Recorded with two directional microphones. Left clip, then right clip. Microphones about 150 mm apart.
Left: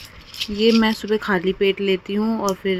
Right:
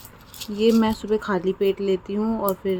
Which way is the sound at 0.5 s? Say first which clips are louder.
Left 2 dB; 10° left (ahead or behind).